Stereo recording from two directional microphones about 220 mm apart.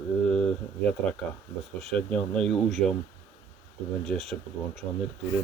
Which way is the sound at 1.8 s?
5° left (ahead or behind).